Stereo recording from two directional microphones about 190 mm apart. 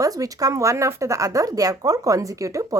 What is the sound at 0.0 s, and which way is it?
A woman's voice, 20° right (ahead or behind).